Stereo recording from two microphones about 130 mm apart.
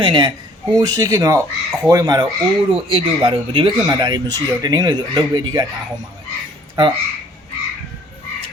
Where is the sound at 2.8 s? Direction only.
40° right (ahead or behind).